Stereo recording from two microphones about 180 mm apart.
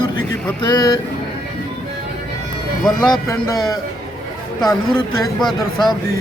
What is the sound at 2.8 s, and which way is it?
Speech, 5° left (ahead or behind).